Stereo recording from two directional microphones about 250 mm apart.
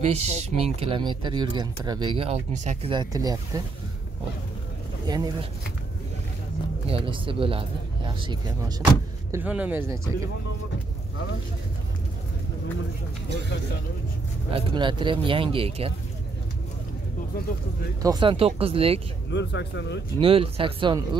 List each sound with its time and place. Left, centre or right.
0.0 s speech: right
5.0 s speech: centre
6.9 s speech: right
14.5 s speech: centre
18.0 s speech: centre
19.3 s speech: left
20.2 s speech: right